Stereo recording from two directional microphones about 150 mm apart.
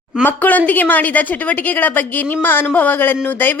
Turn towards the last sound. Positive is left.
turn(degrees=15)  # may be behind; listen again after turning